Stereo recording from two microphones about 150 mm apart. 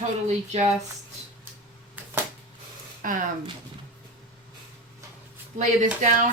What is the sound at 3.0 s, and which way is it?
Speech, 65° right (ahead or behind).